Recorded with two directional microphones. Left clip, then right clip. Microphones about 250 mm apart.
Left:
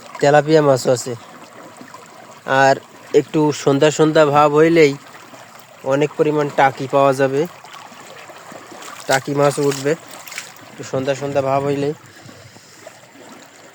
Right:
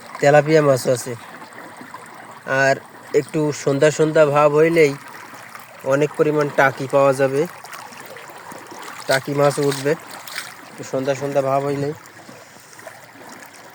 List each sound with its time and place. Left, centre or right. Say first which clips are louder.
0.2 s speech: left 1 dB; centre
2.5 s speech: left 4 dB; centre
5.8 s speech: left 1 dB; centre
9.0 s speech: left 1 dB; centre